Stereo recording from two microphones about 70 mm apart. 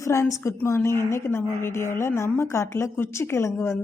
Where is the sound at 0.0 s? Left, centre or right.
Left.